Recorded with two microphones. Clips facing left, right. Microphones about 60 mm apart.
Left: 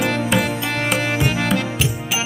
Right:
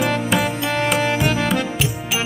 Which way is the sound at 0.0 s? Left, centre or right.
Centre.